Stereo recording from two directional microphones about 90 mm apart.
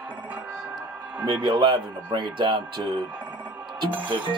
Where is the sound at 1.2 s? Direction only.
60° right (ahead or behind).